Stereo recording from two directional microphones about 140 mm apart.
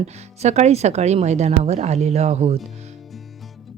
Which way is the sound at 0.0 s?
55° right (ahead or behind).